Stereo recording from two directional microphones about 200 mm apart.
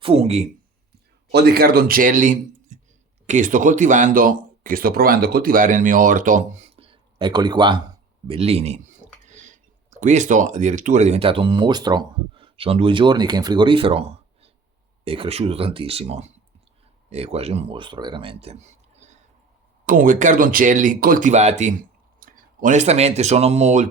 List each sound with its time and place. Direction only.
0.0 s speech: 30° right (ahead or behind)
1.3 s a man's voice: 55° right (ahead or behind); by 23.9 s 35° right (ahead or behind)